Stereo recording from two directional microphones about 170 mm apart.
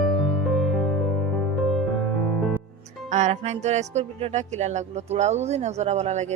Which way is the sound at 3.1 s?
45° right (ahead or behind).